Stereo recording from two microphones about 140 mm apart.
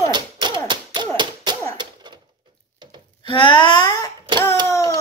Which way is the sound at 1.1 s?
30° right (ahead or behind).